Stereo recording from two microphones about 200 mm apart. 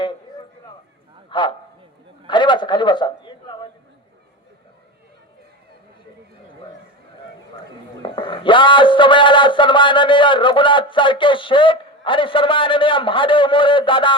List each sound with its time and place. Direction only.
1.3 s a man's voice: 25° left (ahead or behind)
7.6 s a man's voice: 25° left (ahead or behind)